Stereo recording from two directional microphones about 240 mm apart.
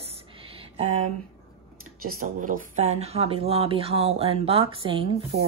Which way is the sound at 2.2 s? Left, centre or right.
Right.